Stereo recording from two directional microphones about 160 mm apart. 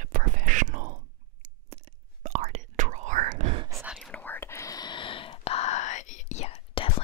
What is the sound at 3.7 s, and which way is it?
Whispering, centre (ahead or behind).